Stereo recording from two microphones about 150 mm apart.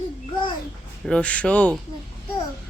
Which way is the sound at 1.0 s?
5° left (ahead or behind).